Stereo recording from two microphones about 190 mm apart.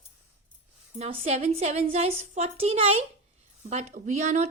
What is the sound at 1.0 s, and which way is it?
A woman's voice, 35° right (ahead or behind).